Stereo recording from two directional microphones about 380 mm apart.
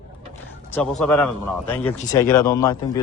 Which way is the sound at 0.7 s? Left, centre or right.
Centre.